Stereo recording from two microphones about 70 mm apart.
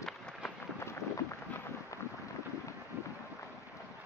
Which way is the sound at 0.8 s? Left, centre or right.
Left.